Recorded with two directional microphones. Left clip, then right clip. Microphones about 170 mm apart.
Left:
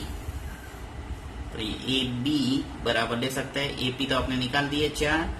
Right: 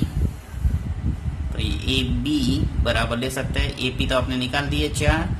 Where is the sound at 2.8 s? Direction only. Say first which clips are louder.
Right 3 dB; 40° right (ahead or behind).